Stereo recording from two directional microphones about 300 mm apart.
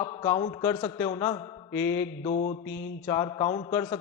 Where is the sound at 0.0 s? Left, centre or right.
Centre.